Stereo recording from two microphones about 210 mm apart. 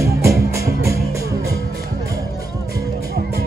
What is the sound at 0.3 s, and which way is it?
Music, 45° left (ahead or behind).